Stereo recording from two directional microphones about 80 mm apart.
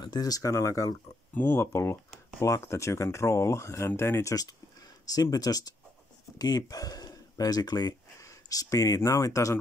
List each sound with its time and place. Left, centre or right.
0.0 s speech: left
1.3 s speech: left
8.2 s speech: left